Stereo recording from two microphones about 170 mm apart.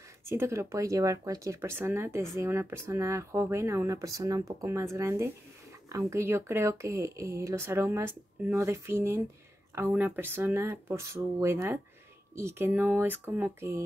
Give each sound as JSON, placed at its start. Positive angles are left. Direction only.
{"t": 0.2, "sound": "speech", "side_deg": -15}